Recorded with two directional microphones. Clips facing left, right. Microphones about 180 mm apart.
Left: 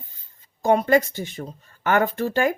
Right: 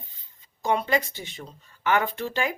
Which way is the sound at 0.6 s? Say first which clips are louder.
Left 7 dB; 45° left (ahead or behind).